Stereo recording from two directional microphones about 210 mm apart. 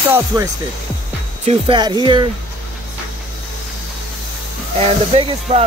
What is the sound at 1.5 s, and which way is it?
Speech, 25° right (ahead or behind).